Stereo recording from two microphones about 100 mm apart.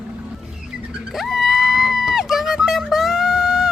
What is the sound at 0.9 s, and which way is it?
Screaming, centre (ahead or behind).